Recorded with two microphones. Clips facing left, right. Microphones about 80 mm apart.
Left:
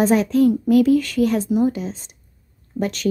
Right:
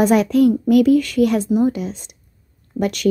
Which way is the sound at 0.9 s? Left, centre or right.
Left.